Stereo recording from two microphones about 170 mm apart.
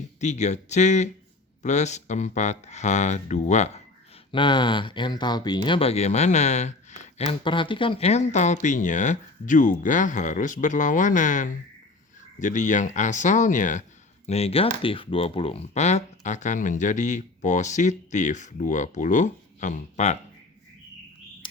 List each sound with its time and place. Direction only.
0.2 s speech: 45° left (ahead or behind)
4.3 s speech: 30° left (ahead or behind); by 13.8 s 45° left (ahead or behind)
14.3 s speech: 35° left (ahead or behind)